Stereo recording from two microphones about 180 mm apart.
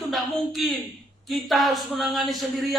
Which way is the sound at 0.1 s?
Centre (ahead or behind).